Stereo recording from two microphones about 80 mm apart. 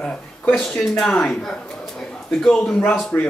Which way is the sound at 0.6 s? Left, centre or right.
Centre.